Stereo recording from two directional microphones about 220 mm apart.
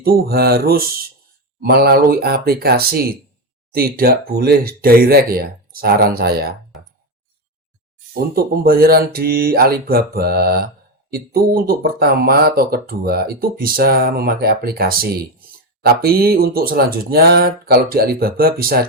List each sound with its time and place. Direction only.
0.0 s speech: 45° right (ahead or behind)
8.1 s speech: 45° right (ahead or behind)